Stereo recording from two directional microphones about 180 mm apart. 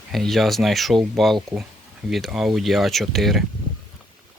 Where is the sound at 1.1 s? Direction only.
Centre (ahead or behind).